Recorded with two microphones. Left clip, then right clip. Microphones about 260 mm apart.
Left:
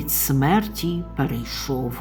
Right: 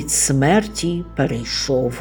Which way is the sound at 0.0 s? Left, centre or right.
Centre.